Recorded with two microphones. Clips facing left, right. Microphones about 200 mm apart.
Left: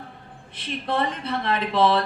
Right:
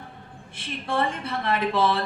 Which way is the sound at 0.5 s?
25° right (ahead or behind).